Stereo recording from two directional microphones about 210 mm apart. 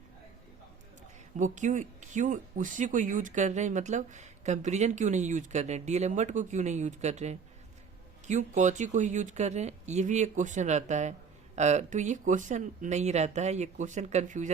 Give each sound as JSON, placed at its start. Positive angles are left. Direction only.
{"t": 1.4, "sound": "speech", "side_deg": -35}